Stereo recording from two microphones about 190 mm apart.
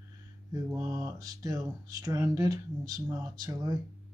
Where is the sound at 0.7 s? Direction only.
15° right (ahead or behind).